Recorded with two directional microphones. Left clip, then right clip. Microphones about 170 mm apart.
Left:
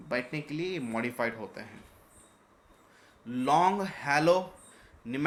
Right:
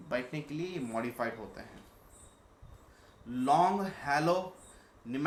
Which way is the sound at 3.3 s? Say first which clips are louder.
Left 2 dB; 45° left (ahead or behind).